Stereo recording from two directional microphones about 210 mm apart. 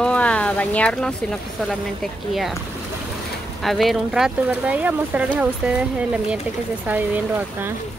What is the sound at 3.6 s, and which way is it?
Speech, centre (ahead or behind).